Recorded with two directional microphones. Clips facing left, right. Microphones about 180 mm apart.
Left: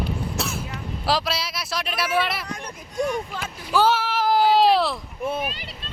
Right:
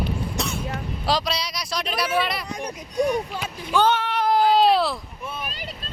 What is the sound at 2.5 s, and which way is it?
Speech, 15° right (ahead or behind).